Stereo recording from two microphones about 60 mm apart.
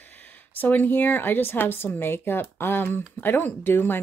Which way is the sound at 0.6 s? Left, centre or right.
Left.